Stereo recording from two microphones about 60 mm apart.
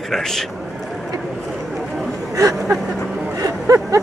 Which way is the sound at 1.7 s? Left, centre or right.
Centre.